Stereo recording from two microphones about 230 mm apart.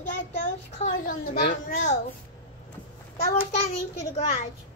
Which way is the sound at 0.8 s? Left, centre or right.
Left.